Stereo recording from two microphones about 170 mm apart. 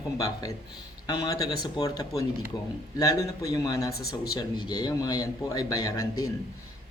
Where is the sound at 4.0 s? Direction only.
65° left (ahead or behind).